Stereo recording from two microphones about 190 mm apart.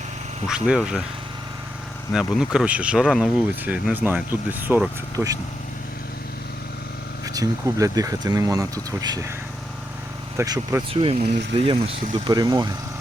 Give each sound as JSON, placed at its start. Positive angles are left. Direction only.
{"t": 0.4, "sound": "speech", "side_deg": -5}
{"t": 2.1, "sound": "speech", "side_deg": -5}
{"t": 7.3, "sound": "speech", "side_deg": -15}
{"t": 10.3, "sound": "speech", "side_deg": -15}
{"t": 10.9, "sound": "speech", "side_deg": -30}